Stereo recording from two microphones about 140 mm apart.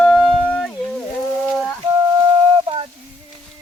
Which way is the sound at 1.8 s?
35° right (ahead or behind).